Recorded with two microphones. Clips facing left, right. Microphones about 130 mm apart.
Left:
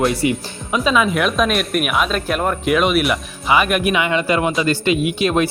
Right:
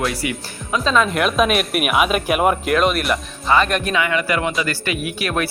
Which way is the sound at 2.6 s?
Centre (ahead or behind).